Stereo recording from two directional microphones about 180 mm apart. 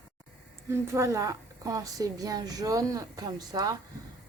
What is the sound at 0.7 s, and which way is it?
Speech, 15° right (ahead or behind).